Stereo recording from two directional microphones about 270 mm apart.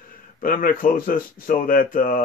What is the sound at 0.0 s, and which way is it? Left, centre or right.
Speech, left.